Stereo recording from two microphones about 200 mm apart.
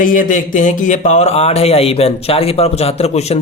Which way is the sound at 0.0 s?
40° left (ahead or behind).